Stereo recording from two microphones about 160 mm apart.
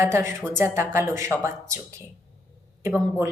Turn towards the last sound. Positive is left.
turn(degrees=-15)  # may be behind; listen again after turning